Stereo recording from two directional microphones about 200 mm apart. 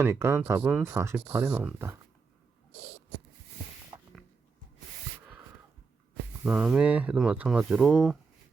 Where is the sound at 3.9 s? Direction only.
25° right (ahead or behind).